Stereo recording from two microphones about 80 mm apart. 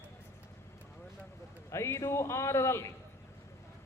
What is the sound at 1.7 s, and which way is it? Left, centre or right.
A man's voice, left.